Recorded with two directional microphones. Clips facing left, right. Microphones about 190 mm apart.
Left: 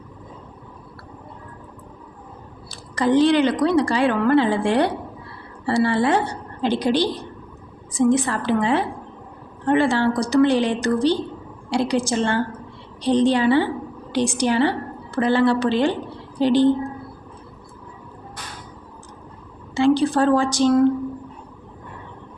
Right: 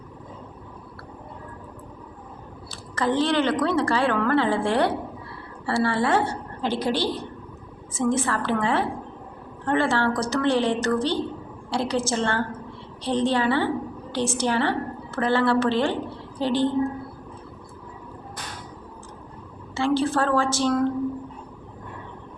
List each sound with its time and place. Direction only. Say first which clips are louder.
2.6 s a woman's voice: left 5 dB; 15° left (ahead or behind)
19.7 s a woman's voice: left 5 dB; 15° left (ahead or behind)